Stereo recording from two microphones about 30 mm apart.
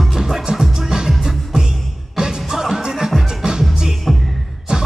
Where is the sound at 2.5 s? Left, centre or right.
Centre.